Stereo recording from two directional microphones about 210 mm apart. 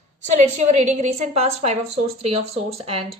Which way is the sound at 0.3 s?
35° right (ahead or behind).